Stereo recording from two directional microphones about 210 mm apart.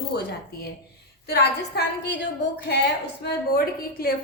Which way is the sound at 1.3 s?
50° left (ahead or behind).